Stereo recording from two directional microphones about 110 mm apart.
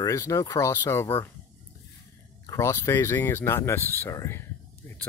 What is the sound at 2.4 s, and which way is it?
Speech, 25° left (ahead or behind).